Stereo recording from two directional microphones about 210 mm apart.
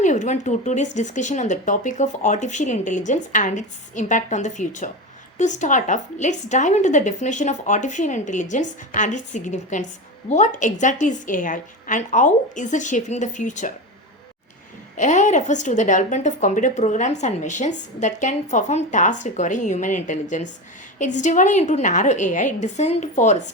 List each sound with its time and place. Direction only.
0.0 s a woman's voice: 35° left (ahead or behind)
14.9 s a woman's voice: 35° left (ahead or behind)